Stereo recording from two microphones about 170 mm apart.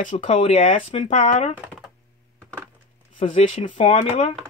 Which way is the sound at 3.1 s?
35° left (ahead or behind).